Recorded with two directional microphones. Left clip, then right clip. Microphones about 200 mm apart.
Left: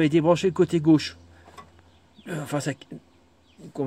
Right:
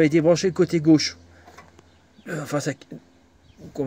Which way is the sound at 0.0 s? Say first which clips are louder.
Right 2 dB; 5° left (ahead or behind).